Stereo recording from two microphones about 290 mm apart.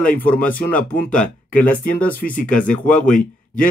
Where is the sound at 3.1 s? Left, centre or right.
Left.